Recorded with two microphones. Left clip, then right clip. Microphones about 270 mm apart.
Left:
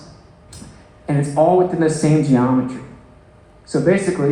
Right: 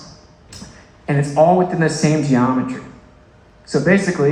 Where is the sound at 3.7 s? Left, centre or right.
Right.